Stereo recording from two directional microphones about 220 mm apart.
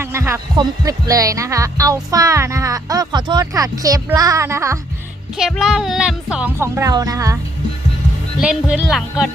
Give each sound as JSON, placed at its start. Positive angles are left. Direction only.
{"t": 0.0, "sound": "heart sounds", "side_deg": -10}
{"t": 5.4, "sound": "speech", "side_deg": 0}
{"t": 6.3, "sound": "heart sounds", "side_deg": -10}
{"t": 8.4, "sound": "speech", "side_deg": -5}